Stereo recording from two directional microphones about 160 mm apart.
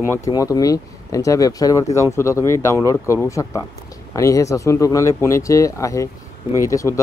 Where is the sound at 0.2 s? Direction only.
20° left (ahead or behind).